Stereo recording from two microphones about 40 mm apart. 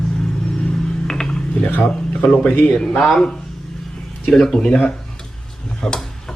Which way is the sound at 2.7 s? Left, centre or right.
Centre.